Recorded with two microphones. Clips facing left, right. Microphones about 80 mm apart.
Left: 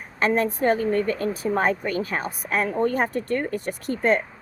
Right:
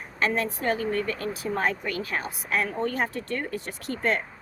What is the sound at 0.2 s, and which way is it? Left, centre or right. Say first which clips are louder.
Speech: left 5 dB; left.